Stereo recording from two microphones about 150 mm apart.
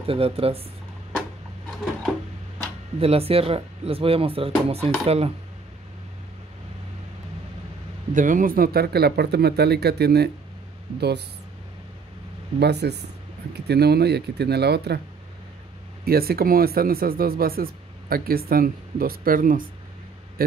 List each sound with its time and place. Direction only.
0.0 s speech: 40° right (ahead or behind)
3.0 s speech: 40° right (ahead or behind)
8.1 s speech: 60° right (ahead or behind); by 11.2 s 90° right
12.5 s speech: 90° right
16.1 s speech: 90° right; by 19.7 s 70° right (ahead or behind)
20.4 s speech: 80° right